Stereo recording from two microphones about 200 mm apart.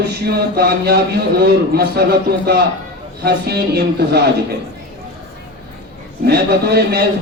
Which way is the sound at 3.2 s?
50° right (ahead or behind).